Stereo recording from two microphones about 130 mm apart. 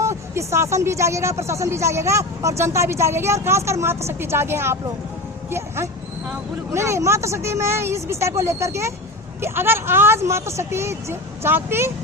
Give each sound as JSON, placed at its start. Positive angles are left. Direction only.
{"t": 0.0, "sound": "speech", "side_deg": -20}